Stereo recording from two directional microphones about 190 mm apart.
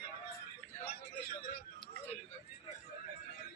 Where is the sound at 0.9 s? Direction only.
55° left (ahead or behind).